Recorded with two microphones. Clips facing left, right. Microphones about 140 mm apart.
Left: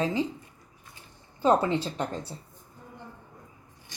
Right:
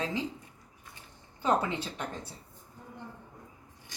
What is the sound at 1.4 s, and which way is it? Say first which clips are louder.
Speech: left 6 dB; 30° left (ahead or behind).